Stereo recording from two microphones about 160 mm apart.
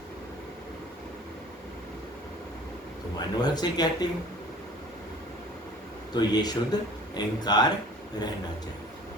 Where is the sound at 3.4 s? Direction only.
25° left (ahead or behind).